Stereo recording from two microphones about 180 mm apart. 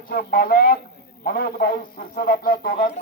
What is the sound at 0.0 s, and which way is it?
Speech, 50° left (ahead or behind).